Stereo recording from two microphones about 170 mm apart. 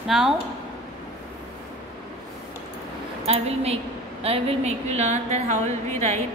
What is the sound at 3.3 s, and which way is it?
A woman's voice, 35° right (ahead or behind).